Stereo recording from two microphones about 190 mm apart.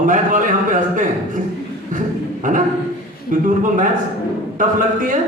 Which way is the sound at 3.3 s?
45° right (ahead or behind).